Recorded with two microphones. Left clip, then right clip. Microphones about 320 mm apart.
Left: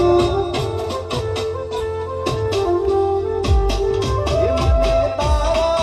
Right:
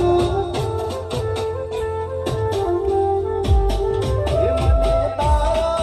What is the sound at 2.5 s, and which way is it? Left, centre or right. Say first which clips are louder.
Music: left 2 dB; left.